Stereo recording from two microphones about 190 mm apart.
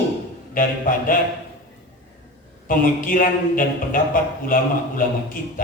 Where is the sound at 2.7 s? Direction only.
45° left (ahead or behind).